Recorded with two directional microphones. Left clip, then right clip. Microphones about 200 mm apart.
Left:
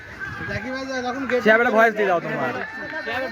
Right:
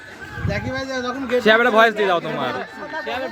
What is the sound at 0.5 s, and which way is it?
Speech, 45° right (ahead or behind).